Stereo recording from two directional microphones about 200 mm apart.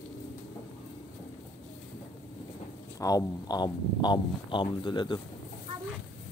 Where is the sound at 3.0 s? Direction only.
15° left (ahead or behind).